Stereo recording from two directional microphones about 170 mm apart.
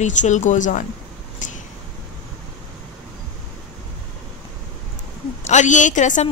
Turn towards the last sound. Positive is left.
turn(degrees=45)  # may be behind; listen again after turning